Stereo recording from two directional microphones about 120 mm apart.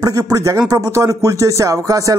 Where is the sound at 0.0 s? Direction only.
30° right (ahead or behind).